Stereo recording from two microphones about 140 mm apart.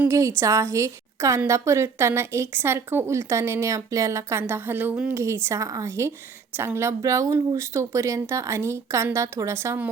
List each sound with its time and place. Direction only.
0.1 s speech: 20° right (ahead or behind)